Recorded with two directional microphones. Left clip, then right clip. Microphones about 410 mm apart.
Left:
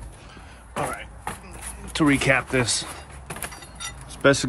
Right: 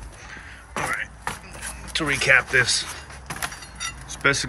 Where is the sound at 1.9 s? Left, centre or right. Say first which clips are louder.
Right 1 dB; centre.